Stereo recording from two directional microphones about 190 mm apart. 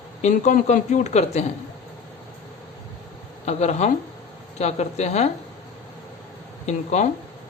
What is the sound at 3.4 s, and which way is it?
Speech, 35° left (ahead or behind).